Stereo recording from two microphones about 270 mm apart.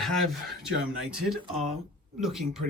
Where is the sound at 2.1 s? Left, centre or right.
Centre.